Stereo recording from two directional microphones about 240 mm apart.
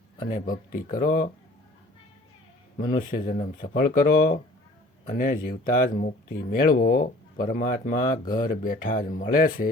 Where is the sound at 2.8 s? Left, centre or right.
Left.